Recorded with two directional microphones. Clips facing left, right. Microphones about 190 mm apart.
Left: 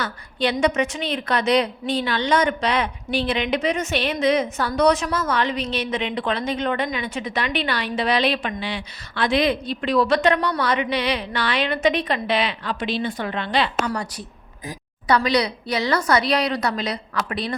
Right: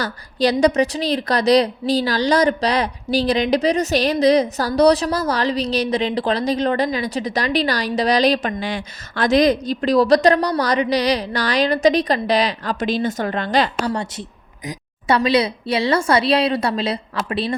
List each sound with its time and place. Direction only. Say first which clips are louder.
0.0 s a woman's voice: right 5 dB; 40° right (ahead or behind)
13.9 s a woman's voice: right 3 dB; 25° right (ahead or behind)